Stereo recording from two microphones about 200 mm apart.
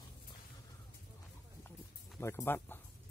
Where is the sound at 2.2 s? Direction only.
15° left (ahead or behind).